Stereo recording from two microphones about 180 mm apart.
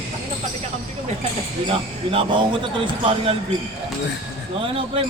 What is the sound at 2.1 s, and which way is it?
Speech, 30° right (ahead or behind).